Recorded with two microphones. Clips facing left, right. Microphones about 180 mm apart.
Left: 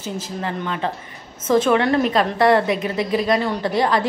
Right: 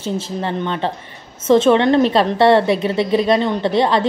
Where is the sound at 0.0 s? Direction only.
30° right (ahead or behind).